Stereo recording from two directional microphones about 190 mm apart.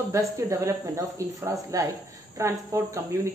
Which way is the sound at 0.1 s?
15° right (ahead or behind).